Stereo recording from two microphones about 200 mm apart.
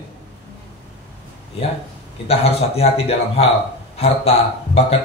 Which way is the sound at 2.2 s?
30° left (ahead or behind).